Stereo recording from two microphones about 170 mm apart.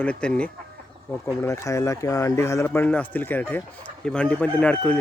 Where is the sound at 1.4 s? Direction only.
20° left (ahead or behind).